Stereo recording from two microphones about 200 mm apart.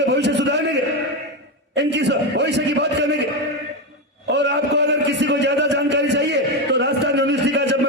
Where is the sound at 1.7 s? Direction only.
60° right (ahead or behind).